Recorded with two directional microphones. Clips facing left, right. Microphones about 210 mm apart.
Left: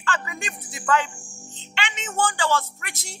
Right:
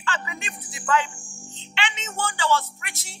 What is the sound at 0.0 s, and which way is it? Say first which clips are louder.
A man's voice: left 2 dB; 45° left (ahead or behind).